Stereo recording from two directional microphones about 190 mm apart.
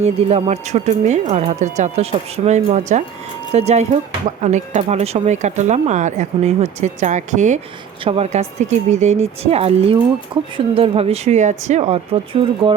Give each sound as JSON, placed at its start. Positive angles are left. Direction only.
{"t": 0.0, "sound": "speech", "side_deg": -35}